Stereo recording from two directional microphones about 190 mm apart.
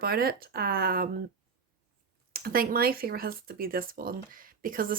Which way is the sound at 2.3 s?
50° right (ahead or behind).